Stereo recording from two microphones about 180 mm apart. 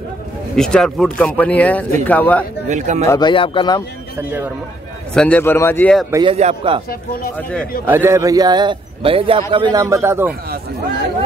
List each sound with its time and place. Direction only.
0.6 s a man's voice: 5° left (ahead or behind)
2.7 s a man's voice: 40° right (ahead or behind)
3.1 s speech: 25° left (ahead or behind)
4.2 s speech: 10° right (ahead or behind)
5.1 s a man's voice: 5° left (ahead or behind)
6.2 s a man's voice: 35° right (ahead or behind)
7.8 s a man's voice: 10° right (ahead or behind)